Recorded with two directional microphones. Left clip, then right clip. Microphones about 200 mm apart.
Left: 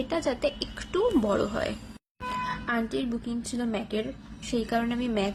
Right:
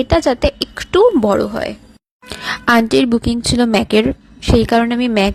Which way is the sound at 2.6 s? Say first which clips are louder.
Right 17 dB; 50° right (ahead or behind).